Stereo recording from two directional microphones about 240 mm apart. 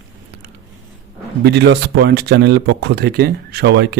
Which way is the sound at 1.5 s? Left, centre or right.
Right.